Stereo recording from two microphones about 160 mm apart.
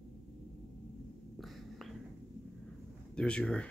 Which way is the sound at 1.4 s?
Centre (ahead or behind).